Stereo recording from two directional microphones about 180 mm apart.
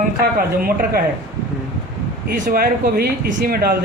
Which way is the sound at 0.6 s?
55° right (ahead or behind).